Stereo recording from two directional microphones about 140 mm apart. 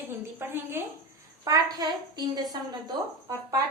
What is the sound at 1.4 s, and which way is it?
A woman's voice, 25° right (ahead or behind).